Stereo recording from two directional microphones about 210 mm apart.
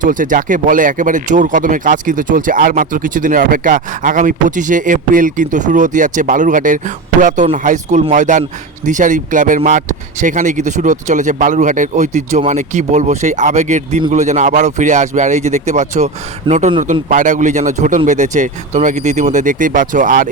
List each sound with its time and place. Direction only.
0.0 s speech: 40° right (ahead or behind)